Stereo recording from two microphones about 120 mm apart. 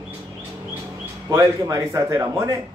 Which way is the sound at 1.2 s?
25° right (ahead or behind).